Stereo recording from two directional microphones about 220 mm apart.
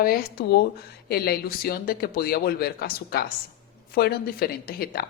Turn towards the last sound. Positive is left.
turn(degrees=45)  # may be behind; listen again after turning